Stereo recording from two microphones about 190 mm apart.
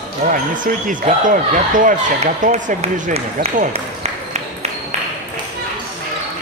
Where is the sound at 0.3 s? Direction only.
45° right (ahead or behind).